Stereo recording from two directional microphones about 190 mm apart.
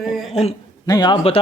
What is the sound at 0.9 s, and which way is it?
Speech, 20° left (ahead or behind).